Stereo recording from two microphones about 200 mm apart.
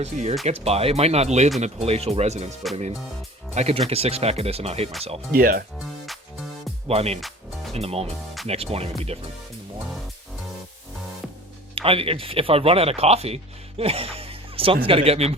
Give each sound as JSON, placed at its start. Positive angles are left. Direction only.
{"t": 0.0, "sound": "speech", "side_deg": -35}
{"t": 3.5, "sound": "speech", "side_deg": -30}
{"t": 5.3, "sound": "speech", "side_deg": -45}
{"t": 6.8, "sound": "speech", "side_deg": -30}
{"t": 7.2, "sound": "music", "side_deg": 0}
{"t": 7.7, "sound": "speech", "side_deg": -30}
{"t": 11.7, "sound": "speech", "side_deg": -30}